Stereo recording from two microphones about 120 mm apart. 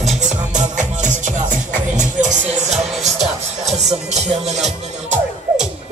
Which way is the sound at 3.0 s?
65° right (ahead or behind).